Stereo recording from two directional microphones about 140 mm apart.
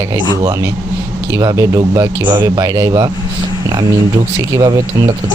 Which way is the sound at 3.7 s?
30° right (ahead or behind).